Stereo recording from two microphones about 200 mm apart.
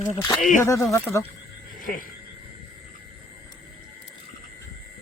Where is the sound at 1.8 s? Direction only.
45° left (ahead or behind).